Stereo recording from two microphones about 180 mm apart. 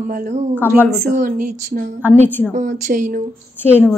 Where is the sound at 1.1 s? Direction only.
45° right (ahead or behind).